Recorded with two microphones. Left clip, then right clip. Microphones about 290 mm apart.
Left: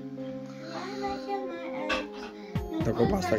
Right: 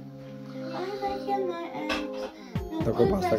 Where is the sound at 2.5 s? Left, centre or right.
Centre.